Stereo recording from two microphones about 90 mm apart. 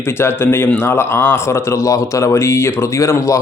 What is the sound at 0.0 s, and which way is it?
A man's voice, 25° left (ahead or behind).